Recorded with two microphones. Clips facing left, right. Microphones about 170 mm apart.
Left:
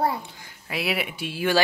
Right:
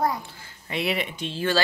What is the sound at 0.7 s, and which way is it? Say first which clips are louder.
Speech: right 1 dB; 5° left (ahead or behind).